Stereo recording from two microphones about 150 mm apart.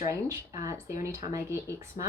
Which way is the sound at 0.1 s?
20° right (ahead or behind).